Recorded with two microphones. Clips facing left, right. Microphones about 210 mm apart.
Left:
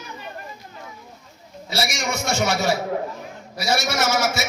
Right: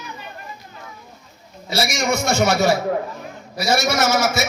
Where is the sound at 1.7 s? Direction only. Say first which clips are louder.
Right 5 dB; 45° right (ahead or behind).